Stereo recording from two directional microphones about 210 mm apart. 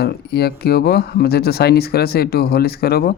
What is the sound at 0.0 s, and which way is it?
Speech, 50° left (ahead or behind).